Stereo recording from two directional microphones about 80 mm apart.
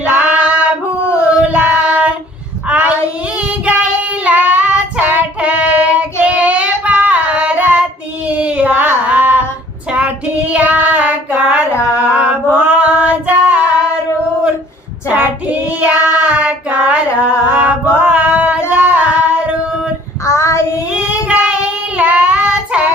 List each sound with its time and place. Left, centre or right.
0.0 s female singing: centre
1.1 s child singing: centre
10.5 s child singing: centre
11.4 s a sound: centre
12.0 s mantra: centre
12.5 s female singing: centre
15.0 s female singing: centre
15.8 s child singing: centre
17.2 s music: left
17.5 s a sound: centre
18.7 s singing: centre
20.2 s child singing: left
20.9 s child singing: centre